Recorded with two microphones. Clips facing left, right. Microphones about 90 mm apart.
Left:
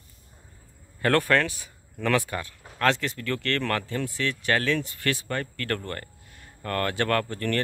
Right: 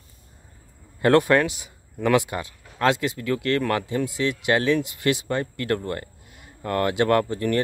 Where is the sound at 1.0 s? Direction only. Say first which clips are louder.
Right 5 dB; 20° right (ahead or behind).